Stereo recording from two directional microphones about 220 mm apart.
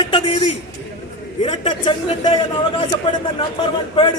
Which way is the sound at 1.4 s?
20° left (ahead or behind).